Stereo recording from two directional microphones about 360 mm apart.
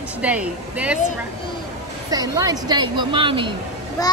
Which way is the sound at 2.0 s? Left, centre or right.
Centre.